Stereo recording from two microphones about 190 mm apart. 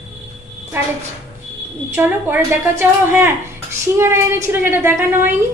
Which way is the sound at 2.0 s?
10° right (ahead or behind).